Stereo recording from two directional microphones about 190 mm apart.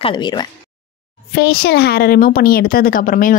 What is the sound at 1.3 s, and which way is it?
A woman's voice, 55° left (ahead or behind).